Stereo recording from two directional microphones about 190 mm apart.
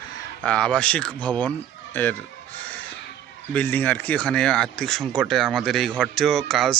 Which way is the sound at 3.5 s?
10° left (ahead or behind).